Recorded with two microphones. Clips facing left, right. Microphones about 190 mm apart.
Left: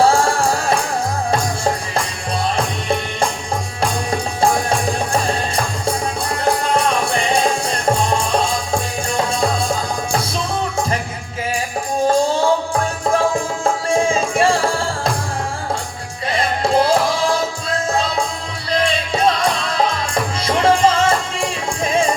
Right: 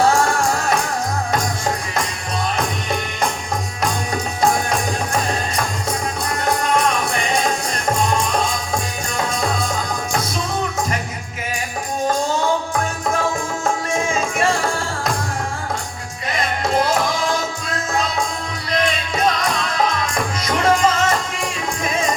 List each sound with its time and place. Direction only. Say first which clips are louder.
0.0 s music: left 2 dB; 30° left (ahead or behind)
2.6 s music: left 3 dB; 30° left (ahead or behind)
12.0 s music: left 4 dB; 30° left (ahead or behind)
16.3 s music: left 3 dB; 30° left (ahead or behind)